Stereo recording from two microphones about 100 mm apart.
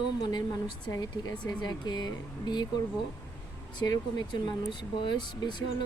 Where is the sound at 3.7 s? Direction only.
45° left (ahead or behind).